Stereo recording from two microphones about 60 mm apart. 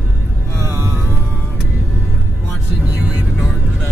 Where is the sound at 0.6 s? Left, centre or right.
Right.